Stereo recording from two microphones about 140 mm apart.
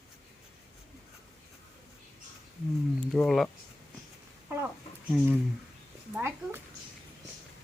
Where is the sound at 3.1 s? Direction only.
Centre (ahead or behind).